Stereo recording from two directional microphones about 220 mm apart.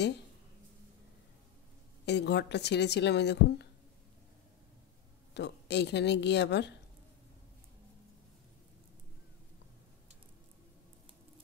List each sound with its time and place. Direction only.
2.0 s a woman's voice: 50° left (ahead or behind)
5.3 s a woman's voice: 50° left (ahead or behind)